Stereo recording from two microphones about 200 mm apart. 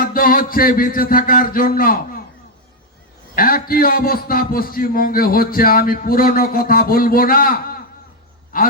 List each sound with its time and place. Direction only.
0.0 s a man's voice: 45° left (ahead or behind)
3.3 s a man's voice: 45° left (ahead or behind)